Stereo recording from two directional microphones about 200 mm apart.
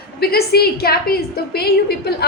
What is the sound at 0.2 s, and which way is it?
A woman's voice, 50° left (ahead or behind).